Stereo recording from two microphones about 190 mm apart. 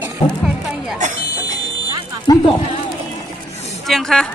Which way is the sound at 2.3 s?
20° left (ahead or behind).